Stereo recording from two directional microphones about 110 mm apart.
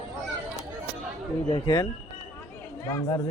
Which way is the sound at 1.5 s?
35° left (ahead or behind).